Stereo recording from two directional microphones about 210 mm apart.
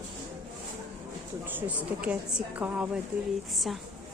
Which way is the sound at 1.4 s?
10° right (ahead or behind).